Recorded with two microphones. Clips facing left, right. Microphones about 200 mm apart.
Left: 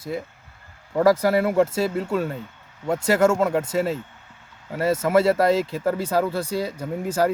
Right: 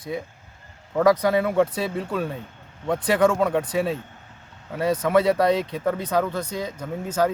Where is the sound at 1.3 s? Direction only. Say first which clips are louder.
Left 1 dB; 5° left (ahead or behind).